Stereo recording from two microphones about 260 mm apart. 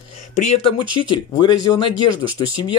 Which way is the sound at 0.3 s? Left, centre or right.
Left.